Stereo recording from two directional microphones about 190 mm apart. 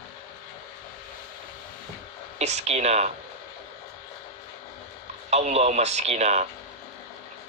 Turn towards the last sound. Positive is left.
turn(degrees=-35)  # may be behind; listen again after turning